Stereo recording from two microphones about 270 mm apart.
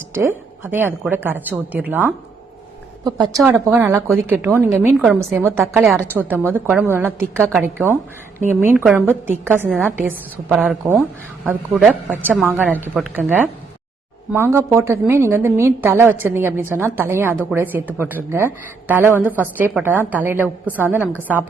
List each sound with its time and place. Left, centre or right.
0.1 s a woman's voice: centre
3.3 s a woman's voice: centre